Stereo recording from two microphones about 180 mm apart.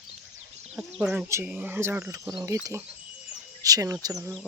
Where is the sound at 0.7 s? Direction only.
5° right (ahead or behind); by 4.3 s 20° right (ahead or behind).